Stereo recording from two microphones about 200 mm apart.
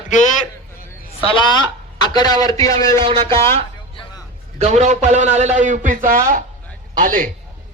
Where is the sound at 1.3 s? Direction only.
25° left (ahead or behind).